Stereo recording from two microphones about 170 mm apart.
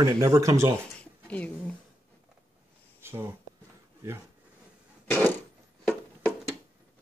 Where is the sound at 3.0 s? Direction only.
15° right (ahead or behind).